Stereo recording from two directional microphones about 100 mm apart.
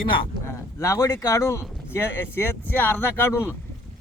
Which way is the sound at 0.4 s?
30° left (ahead or behind).